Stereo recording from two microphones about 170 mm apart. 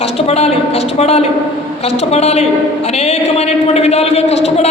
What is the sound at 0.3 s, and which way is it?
A man's voice, 35° left (ahead or behind).